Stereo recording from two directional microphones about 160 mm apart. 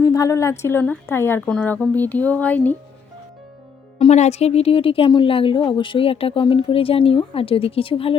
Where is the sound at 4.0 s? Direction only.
40° left (ahead or behind).